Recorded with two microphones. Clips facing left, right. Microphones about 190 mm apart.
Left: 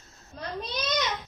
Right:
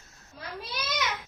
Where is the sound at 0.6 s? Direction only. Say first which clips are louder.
Left 3 dB; 10° right (ahead or behind).